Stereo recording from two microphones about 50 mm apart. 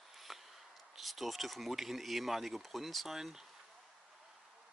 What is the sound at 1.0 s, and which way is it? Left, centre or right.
Speech, centre.